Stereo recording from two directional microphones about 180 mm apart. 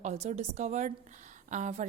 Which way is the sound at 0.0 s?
40° right (ahead or behind).